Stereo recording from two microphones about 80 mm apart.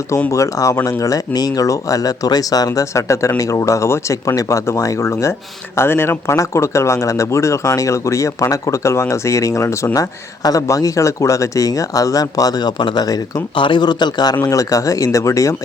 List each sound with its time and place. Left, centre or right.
0.3 s speech: left
13.6 s a man's voice: left
14.4 s speech: left